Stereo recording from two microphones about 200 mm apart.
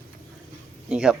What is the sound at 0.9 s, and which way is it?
Speech, 5° right (ahead or behind).